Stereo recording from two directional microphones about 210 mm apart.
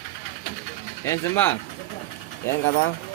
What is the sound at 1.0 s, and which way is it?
Speech, 15° left (ahead or behind).